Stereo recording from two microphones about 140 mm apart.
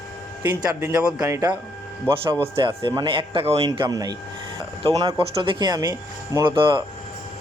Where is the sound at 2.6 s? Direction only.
35° right (ahead or behind).